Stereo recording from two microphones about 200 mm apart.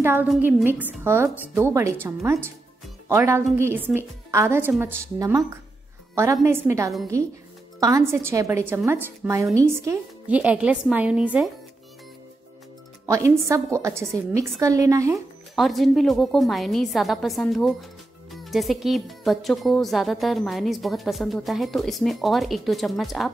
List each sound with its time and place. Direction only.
0.0 s a woman's voice: 10° right (ahead or behind)
13.0 s a woman's voice: 15° right (ahead or behind)
15.5 s speech: centre (ahead or behind)